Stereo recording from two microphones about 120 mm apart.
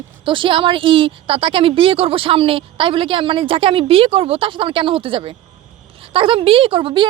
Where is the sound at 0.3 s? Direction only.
45° right (ahead or behind).